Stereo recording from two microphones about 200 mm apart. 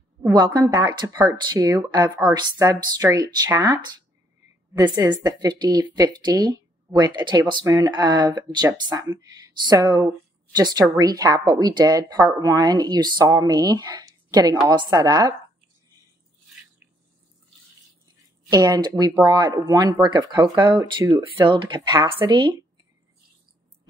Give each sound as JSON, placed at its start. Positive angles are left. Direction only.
{"t": 0.2, "sound": "speech", "side_deg": -20}
{"t": 18.5, "sound": "speech", "side_deg": -20}